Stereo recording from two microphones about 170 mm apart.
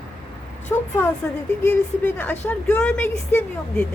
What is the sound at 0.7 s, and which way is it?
Speech, 15° left (ahead or behind).